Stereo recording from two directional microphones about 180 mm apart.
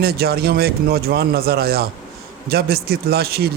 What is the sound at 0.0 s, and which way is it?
A man's voice, 60° right (ahead or behind).